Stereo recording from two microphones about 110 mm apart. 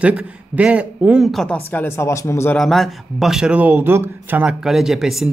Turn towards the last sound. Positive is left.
turn(degrees=-5)  # may be behind; listen again after turning